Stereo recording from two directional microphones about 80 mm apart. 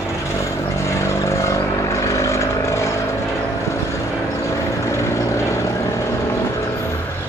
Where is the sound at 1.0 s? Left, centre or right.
Left.